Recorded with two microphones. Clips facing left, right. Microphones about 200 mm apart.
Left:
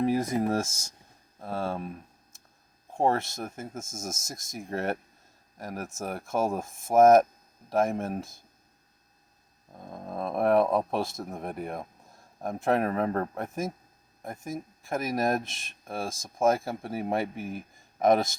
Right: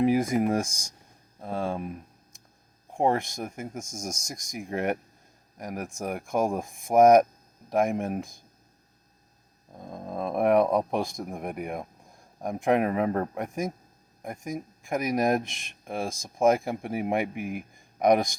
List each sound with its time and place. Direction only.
0.0 s speech: 10° right (ahead or behind)
2.9 s speech: 15° right (ahead or behind)
9.8 s speech: 20° right (ahead or behind)